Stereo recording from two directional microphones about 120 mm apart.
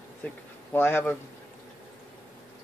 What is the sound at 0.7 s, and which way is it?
Speech, 20° left (ahead or behind).